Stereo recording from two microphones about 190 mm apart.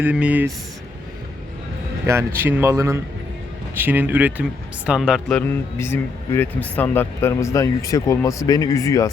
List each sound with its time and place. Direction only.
0.0 s speech: 5° right (ahead or behind)
2.0 s speech: 15° right (ahead or behind)
5.4 s speech: 10° left (ahead or behind)